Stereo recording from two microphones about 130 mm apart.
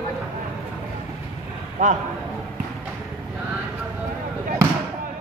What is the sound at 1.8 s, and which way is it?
Speech, 75° right (ahead or behind).